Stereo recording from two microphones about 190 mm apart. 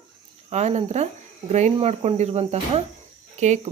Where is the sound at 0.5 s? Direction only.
35° right (ahead or behind).